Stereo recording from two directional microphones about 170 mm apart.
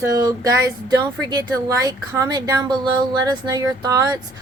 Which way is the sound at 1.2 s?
25° right (ahead or behind).